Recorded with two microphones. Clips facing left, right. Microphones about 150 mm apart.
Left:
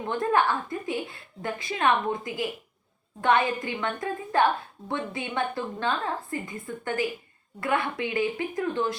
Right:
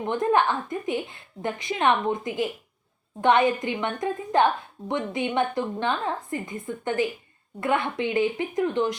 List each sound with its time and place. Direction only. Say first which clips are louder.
0.0 s a woman's voice: right 2 dB; 20° right (ahead or behind)